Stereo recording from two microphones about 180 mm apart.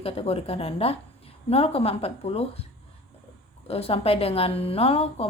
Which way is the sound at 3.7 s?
35° left (ahead or behind).